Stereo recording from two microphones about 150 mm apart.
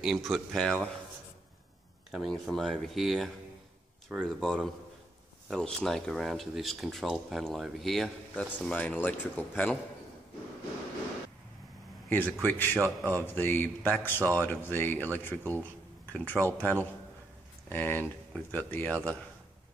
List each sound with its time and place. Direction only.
0.0 s speech: centre (ahead or behind)
2.0 s speech: centre (ahead or behind)
12.1 s speech: 15° left (ahead or behind)
12.8 s speech: 20° right (ahead or behind)
13.3 s speech: 15° left (ahead or behind)